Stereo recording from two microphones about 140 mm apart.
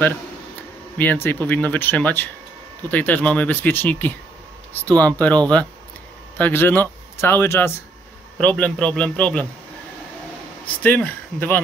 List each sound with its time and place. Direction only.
0.9 s speech: 15° left (ahead or behind)
10.7 s speech: 10° left (ahead or behind)